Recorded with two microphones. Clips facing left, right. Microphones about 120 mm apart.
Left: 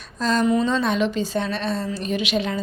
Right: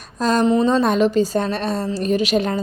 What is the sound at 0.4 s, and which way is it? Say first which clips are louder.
A woman's voice: right 5 dB; 30° right (ahead or behind).